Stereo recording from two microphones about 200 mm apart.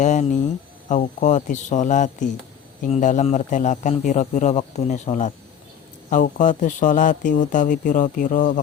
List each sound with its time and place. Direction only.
0.0 s speech: 35° left (ahead or behind)